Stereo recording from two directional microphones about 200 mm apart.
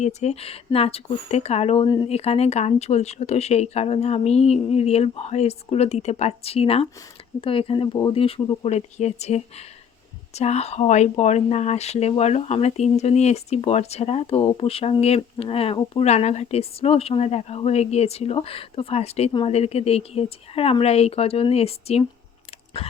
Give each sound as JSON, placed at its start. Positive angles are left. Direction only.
{"t": 0.0, "sound": "speech", "side_deg": 35}